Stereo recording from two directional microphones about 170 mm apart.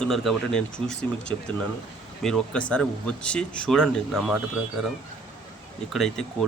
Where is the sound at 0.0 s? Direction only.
Centre (ahead or behind).